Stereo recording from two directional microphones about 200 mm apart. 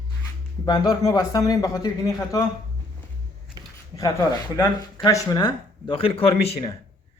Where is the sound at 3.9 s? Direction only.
15° left (ahead or behind).